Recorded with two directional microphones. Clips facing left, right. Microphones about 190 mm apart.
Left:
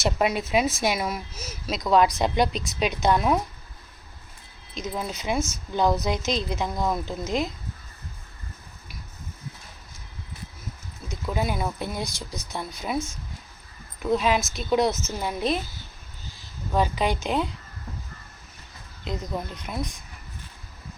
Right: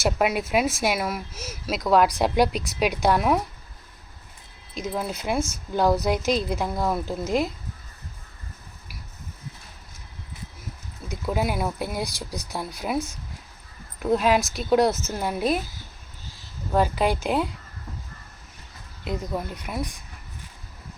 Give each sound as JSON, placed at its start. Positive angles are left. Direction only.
{"t": 0.0, "sound": "a woman's voice", "side_deg": -5}
{"t": 4.7, "sound": "a woman's voice", "side_deg": -5}
{"t": 11.1, "sound": "a woman's voice", "side_deg": -10}
{"t": 12.0, "sound": "speech", "side_deg": -35}
{"t": 12.5, "sound": "a woman's voice", "side_deg": -10}
{"t": 14.0, "sound": "a woman's voice", "side_deg": -5}
{"t": 16.7, "sound": "a woman's voice", "side_deg": -5}
{"t": 19.0, "sound": "a woman's voice", "side_deg": -5}